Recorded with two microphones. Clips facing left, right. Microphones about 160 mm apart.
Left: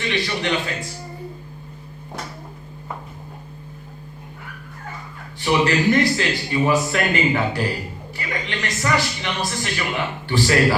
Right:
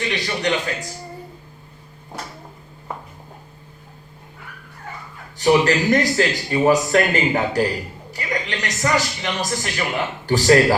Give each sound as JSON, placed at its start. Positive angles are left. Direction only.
{"t": 0.1, "sound": "a man's voice", "side_deg": -40}
{"t": 5.4, "sound": "a man's voice", "side_deg": -40}